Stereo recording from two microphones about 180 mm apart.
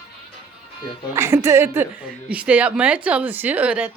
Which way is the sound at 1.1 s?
15° right (ahead or behind).